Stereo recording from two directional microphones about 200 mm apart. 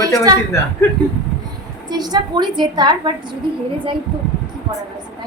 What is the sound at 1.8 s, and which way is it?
A woman's voice, 20° right (ahead or behind).